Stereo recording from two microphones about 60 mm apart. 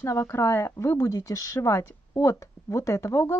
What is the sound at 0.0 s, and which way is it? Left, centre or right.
Speech, left.